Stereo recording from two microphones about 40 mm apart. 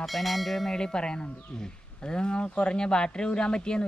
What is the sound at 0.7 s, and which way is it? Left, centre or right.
Speech, centre.